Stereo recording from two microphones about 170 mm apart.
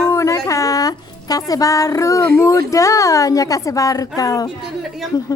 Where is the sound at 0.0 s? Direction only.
15° left (ahead or behind).